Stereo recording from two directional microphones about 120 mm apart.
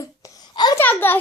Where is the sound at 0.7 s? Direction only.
15° left (ahead or behind).